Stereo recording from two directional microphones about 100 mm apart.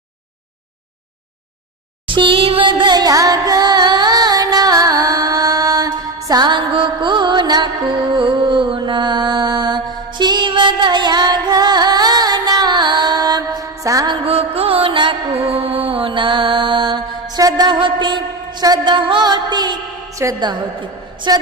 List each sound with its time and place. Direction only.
2.0 s music: 55° right (ahead or behind); by 14.1 s 35° right (ahead or behind)
14.3 s music: 80° right; by 15.1 s 55° right (ahead or behind)
15.4 s mantra: 70° right (ahead or behind); by 17.0 s 50° right (ahead or behind)
17.3 s a sound: 40° right (ahead or behind)
20.2 s a woman's voice: 25° right (ahead or behind)
21.2 s a woman's voice: 45° right (ahead or behind)